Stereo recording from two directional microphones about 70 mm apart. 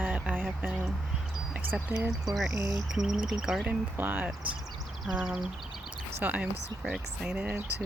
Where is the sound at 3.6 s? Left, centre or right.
Right.